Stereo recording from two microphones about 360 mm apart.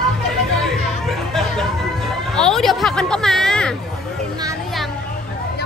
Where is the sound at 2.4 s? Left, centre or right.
Centre.